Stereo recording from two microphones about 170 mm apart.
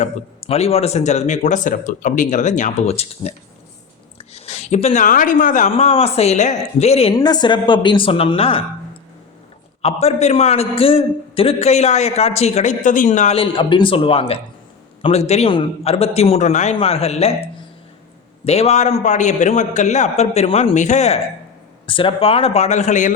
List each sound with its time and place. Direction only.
0.0 s a woman's voice: 35° left (ahead or behind)
5.7 s a man's voice: 35° left (ahead or behind)
7.1 s a woman's voice: 25° left (ahead or behind)
9.8 s a man's voice: 40° left (ahead or behind)
18.4 s speech: 40° left (ahead or behind)
21.8 s a man's voice: 30° left (ahead or behind); by 23.1 s 45° left (ahead or behind)